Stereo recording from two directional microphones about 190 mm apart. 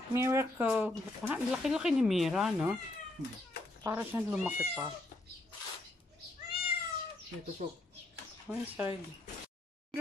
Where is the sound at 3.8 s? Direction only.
10° right (ahead or behind).